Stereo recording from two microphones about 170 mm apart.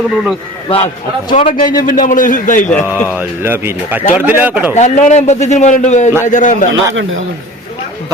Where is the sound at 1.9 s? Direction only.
50° left (ahead or behind).